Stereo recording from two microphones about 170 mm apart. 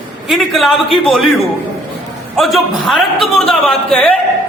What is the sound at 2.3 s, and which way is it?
A man's voice, centre (ahead or behind).